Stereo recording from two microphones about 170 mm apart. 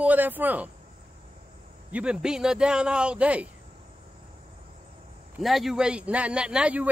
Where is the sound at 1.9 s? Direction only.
5° right (ahead or behind).